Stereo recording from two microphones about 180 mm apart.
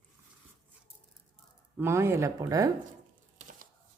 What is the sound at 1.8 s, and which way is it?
Speech, 15° right (ahead or behind).